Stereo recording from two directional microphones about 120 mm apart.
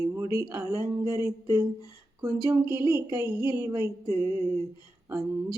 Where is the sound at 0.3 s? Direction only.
20° right (ahead or behind).